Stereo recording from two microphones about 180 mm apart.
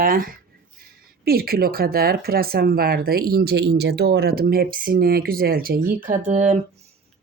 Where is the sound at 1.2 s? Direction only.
60° right (ahead or behind); by 6.6 s 40° right (ahead or behind).